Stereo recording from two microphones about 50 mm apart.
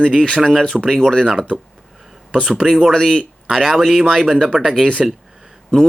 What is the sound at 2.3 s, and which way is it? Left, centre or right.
Speech, centre.